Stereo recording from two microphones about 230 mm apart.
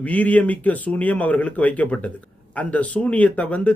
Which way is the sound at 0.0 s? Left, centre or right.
Centre.